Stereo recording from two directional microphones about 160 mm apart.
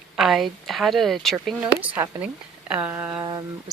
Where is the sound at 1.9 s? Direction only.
10° right (ahead or behind).